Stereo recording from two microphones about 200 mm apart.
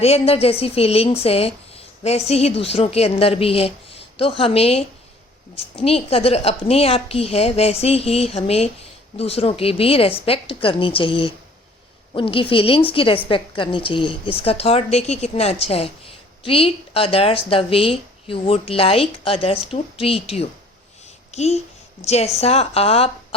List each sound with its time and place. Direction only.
0.0 s a woman's voice: 30° left (ahead or behind)